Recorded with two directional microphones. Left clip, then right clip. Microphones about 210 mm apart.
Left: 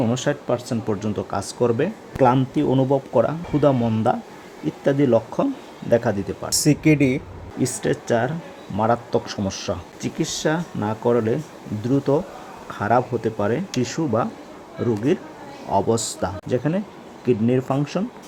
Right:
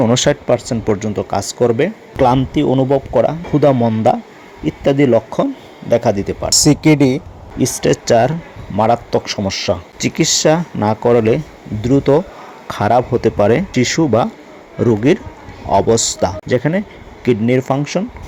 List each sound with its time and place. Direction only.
0.1 s speech: 20° right (ahead or behind)
3.5 s speech: 20° right (ahead or behind)